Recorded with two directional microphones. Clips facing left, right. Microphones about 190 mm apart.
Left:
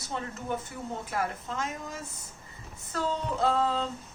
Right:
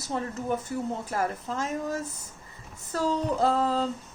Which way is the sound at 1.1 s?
40° right (ahead or behind).